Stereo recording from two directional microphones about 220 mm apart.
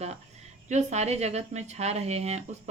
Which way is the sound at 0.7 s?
30° right (ahead or behind).